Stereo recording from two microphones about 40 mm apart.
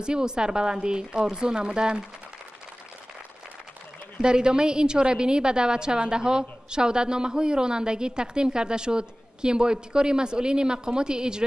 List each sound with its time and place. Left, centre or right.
0.0 s a woman's voice: right
4.2 s a woman's voice: right